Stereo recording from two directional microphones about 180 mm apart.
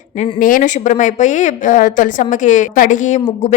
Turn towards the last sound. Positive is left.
turn(degrees=40)  # may be behind; listen again after turning